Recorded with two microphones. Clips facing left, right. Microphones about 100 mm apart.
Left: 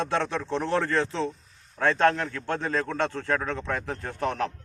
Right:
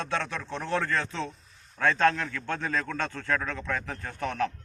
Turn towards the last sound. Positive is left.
turn(degrees=30)  # may be behind; listen again after turning